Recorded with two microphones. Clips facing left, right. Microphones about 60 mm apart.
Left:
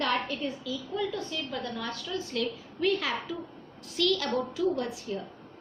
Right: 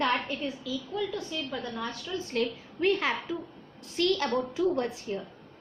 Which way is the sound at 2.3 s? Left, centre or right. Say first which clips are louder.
Right 2 dB; right.